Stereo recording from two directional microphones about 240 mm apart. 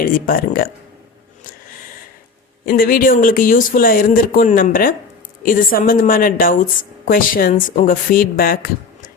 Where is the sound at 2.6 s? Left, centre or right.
Left.